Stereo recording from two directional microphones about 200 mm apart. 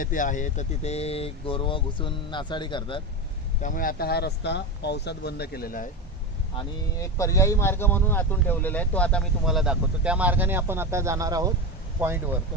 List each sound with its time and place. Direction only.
0.0 s speech: 40° left (ahead or behind); by 3.0 s 25° left (ahead or behind)
3.6 s speech: 40° left (ahead or behind)
6.6 s speech: 15° left (ahead or behind); by 12.2 s 10° right (ahead or behind)